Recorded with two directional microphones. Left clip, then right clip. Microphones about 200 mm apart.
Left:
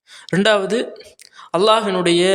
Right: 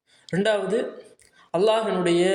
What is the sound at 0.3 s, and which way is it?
A man's voice, 40° left (ahead or behind).